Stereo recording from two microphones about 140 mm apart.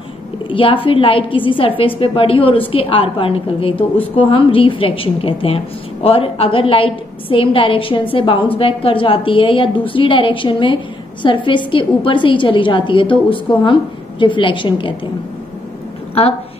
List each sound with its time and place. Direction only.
0.5 s a woman's voice: 40° left (ahead or behind)